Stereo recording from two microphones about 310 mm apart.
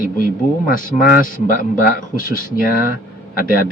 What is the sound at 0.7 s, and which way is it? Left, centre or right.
A man's voice, left.